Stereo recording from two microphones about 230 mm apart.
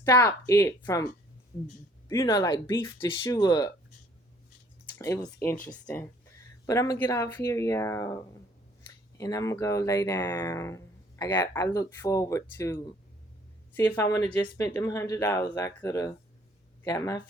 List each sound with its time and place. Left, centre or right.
0.0 s speech: centre
2.0 s speech: centre
4.9 s speech: centre